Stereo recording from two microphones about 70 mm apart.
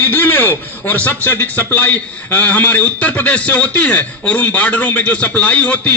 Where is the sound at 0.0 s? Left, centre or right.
Left.